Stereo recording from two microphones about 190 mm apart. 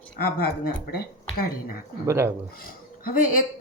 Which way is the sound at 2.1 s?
15° right (ahead or behind).